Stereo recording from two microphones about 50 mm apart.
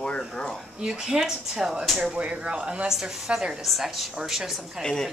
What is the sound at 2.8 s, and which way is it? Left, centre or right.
A woman's voice, centre.